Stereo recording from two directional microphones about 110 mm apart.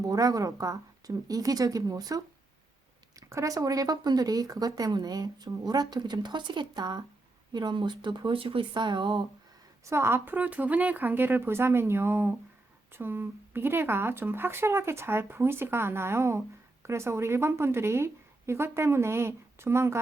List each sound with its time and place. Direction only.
0.0 s speech: 35° right (ahead or behind)
9.8 s speech: 25° right (ahead or behind)